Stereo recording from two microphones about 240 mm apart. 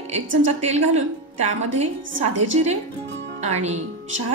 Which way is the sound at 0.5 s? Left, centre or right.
Right.